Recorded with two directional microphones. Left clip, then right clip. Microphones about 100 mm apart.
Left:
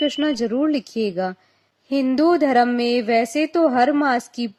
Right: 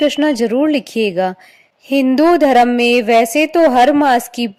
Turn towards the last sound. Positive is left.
turn(degrees=-65)  # may be behind; listen again after turning